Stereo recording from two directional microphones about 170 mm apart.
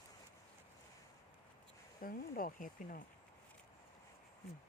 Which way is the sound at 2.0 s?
55° left (ahead or behind).